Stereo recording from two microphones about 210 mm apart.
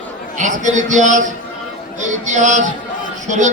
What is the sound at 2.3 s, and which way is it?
Speech, 35° right (ahead or behind).